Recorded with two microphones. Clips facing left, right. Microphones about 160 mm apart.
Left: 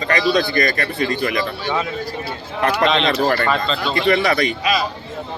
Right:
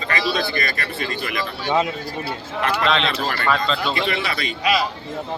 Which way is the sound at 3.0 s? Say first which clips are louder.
Left 7 dB; 45° left (ahead or behind).